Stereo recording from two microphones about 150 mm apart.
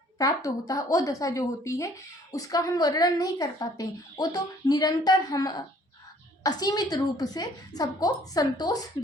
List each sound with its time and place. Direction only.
0.2 s a woman's voice: 25° left (ahead or behind)